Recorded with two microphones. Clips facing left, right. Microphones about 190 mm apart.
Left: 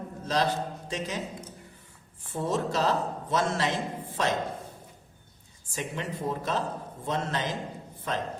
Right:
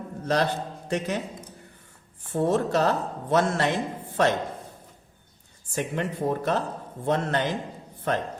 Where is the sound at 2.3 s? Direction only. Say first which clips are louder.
Right 6 dB; 60° right (ahead or behind).